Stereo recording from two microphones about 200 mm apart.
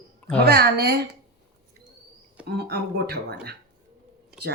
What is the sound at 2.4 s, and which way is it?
Speech, 55° right (ahead or behind).